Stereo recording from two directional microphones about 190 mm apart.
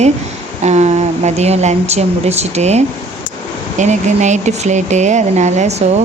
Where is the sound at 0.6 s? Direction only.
35° right (ahead or behind).